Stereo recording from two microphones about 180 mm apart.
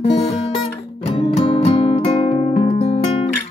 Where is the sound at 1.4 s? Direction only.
35° left (ahead or behind).